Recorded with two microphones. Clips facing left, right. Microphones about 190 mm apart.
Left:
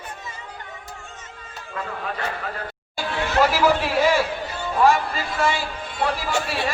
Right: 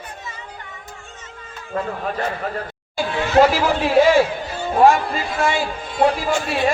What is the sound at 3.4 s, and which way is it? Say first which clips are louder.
Speech: right 3 dB; 50° right (ahead or behind).